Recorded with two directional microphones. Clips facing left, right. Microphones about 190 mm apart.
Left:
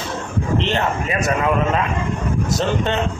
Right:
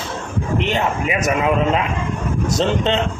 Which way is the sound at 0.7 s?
15° right (ahead or behind).